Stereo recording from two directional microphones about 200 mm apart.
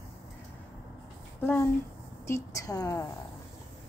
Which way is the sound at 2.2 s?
15° left (ahead or behind).